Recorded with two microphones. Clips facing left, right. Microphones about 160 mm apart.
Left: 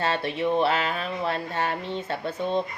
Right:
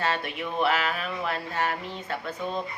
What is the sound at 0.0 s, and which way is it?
Speech, 30° left (ahead or behind).